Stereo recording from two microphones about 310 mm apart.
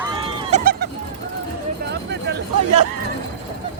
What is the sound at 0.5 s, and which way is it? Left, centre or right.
Music, right.